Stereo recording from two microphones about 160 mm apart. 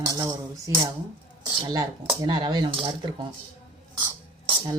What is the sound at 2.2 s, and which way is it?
Speech, 25° right (ahead or behind).